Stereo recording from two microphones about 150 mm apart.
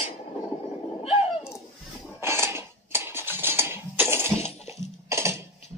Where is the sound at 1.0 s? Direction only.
45° left (ahead or behind).